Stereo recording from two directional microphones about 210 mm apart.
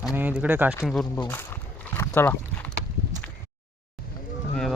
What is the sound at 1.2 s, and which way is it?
Rowboat, 10° left (ahead or behind).